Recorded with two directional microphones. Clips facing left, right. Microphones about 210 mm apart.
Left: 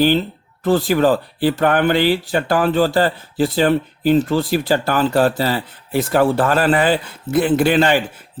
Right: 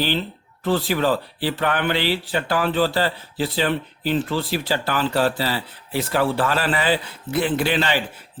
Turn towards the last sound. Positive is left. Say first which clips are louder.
# left 7 dB
turn(degrees=50)  # may be behind; listen again after turning